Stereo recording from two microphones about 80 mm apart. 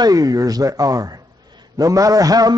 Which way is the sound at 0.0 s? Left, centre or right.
Right.